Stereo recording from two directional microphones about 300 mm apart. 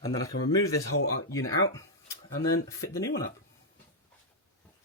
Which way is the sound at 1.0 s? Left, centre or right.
Left.